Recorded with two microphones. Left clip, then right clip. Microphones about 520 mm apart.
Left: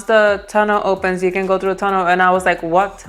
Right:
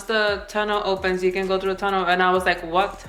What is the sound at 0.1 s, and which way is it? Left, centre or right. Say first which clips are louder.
A woman's voice: left 9 dB; left.